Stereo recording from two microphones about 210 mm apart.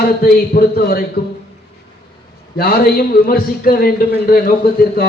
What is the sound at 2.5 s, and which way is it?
A man's voice, 45° left (ahead or behind).